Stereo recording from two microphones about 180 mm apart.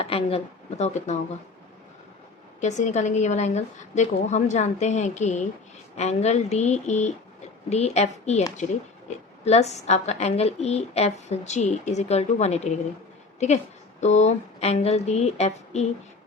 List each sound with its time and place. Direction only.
0.0 s a woman's voice: 30° left (ahead or behind)
2.6 s a woman's voice: 40° left (ahead or behind)
14.0 s a woman's voice: 40° left (ahead or behind)